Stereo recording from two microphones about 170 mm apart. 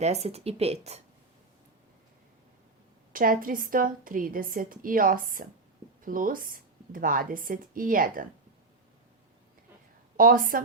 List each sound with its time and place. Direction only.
0.0 s speech: 40° right (ahead or behind)
3.1 s a woman's voice: 55° right (ahead or behind)
10.2 s a woman's voice: 55° right (ahead or behind)